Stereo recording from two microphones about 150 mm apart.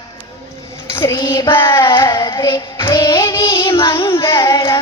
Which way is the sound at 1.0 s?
20° left (ahead or behind).